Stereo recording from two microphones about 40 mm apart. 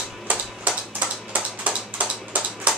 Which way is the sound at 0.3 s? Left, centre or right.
Right.